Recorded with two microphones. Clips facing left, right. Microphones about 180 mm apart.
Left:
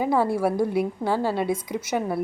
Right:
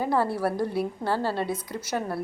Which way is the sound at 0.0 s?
15° left (ahead or behind).